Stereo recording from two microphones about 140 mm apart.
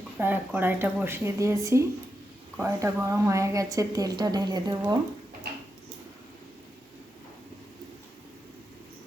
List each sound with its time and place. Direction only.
0.2 s a woman's voice: 15° right (ahead or behind)